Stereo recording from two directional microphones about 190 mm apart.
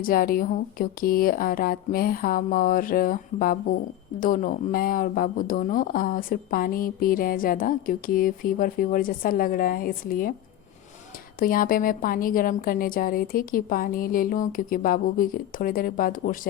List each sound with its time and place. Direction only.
0.0 s speech: 50° left (ahead or behind)
11.3 s speech: 45° left (ahead or behind)